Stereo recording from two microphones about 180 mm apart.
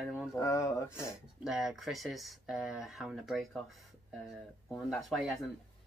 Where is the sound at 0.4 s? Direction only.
20° left (ahead or behind).